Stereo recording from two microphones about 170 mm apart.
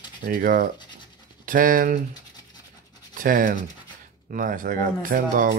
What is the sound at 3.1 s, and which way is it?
Speech, 50° right (ahead or behind).